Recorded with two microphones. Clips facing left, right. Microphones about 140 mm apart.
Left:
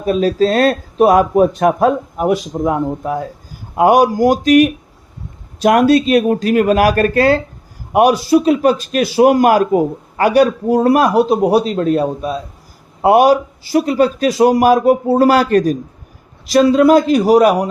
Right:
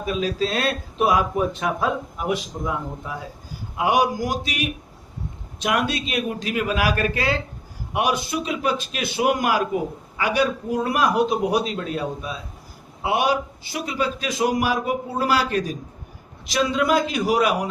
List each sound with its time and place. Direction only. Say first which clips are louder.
0.0 s a man's voice: left 10 dB; 40° left (ahead or behind)
2.6 s a man's voice: left 13 dB; 50° left (ahead or behind)